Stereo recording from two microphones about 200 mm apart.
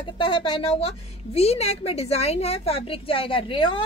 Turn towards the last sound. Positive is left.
turn(degrees=25)  # may be behind; listen again after turning